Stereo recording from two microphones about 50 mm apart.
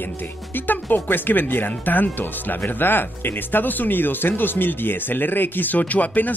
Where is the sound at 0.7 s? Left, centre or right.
Left.